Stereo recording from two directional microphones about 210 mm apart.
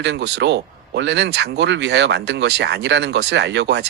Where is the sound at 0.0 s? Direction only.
55° right (ahead or behind).